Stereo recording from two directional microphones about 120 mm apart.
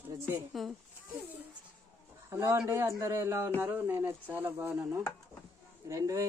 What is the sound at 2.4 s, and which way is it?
Speech, 20° right (ahead or behind).